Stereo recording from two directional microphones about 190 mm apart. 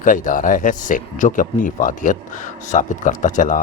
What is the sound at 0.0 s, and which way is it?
A man's voice, 45° left (ahead or behind).